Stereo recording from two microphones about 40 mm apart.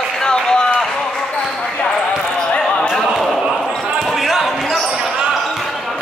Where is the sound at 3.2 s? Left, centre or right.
Centre.